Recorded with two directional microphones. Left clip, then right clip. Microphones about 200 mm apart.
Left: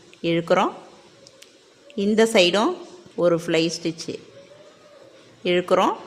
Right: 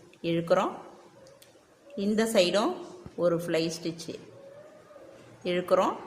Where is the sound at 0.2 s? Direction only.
40° left (ahead or behind).